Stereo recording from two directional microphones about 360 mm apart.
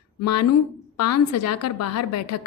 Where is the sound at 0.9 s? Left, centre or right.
Left.